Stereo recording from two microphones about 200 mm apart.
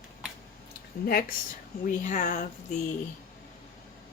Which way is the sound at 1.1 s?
50° left (ahead or behind).